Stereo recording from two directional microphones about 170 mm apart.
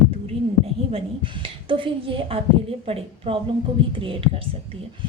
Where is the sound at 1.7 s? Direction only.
30° right (ahead or behind).